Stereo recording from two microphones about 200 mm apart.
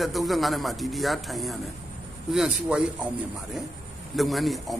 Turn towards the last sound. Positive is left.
turn(degrees=0)  # may be behind; listen again after turning